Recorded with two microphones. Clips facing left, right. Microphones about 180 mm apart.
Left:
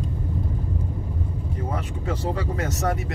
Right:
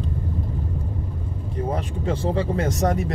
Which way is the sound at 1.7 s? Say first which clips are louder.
Right 4 dB; 30° right (ahead or behind).